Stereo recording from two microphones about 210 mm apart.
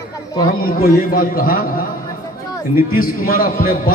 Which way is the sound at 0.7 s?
45° left (ahead or behind).